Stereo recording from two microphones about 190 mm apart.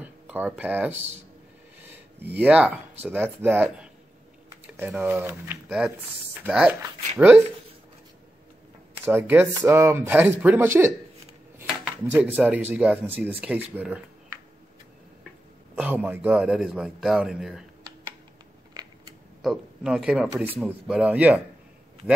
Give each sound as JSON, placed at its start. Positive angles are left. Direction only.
{"t": 0.0, "sound": "speech", "side_deg": -5}
{"t": 9.0, "sound": "speech", "side_deg": -10}
{"t": 12.1, "sound": "speech", "side_deg": -10}
{"t": 13.7, "sound": "a sound", "side_deg": -10}
{"t": 15.7, "sound": "a man's voice", "side_deg": -10}
{"t": 18.7, "sound": "a sound", "side_deg": -20}
{"t": 19.4, "sound": "speech", "side_deg": 0}